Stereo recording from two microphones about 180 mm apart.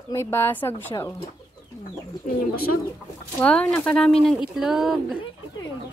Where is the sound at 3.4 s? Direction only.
5° left (ahead or behind).